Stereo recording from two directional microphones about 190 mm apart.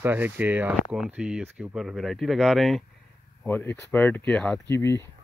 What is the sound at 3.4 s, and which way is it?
Speech, 10° left (ahead or behind).